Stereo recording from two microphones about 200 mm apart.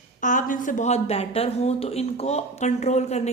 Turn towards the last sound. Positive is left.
turn(degrees=35)  # may be behind; listen again after turning